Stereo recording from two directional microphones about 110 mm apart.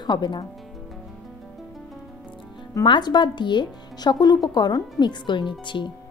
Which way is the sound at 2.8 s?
40° left (ahead or behind).